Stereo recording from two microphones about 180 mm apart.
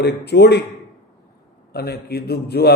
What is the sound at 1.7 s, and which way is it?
Mantra, 60° left (ahead or behind).